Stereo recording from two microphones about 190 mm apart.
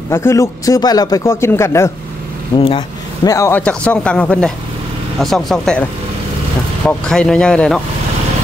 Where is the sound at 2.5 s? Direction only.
25° left (ahead or behind).